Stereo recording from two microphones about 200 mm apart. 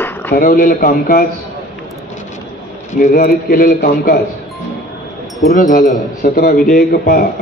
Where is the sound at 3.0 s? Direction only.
45° left (ahead or behind).